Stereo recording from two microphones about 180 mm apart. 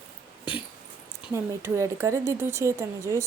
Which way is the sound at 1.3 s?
15° right (ahead or behind).